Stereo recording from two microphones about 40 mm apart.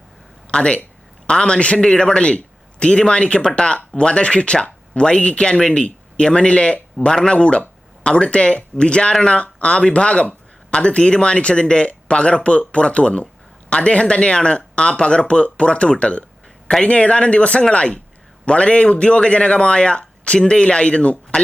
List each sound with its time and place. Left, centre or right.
0.5 s a man's voice: left
5.8 s speech: left
7.3 s speech: left